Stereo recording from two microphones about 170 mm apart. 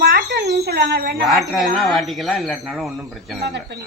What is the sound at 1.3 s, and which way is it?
Speech, centre (ahead or behind).